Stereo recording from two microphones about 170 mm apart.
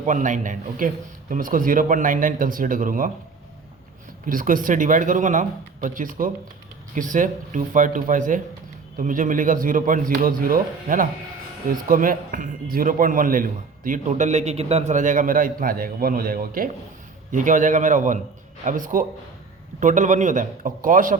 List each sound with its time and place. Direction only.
0.0 s speech: 50° right (ahead or behind)
4.3 s speech: 55° right (ahead or behind)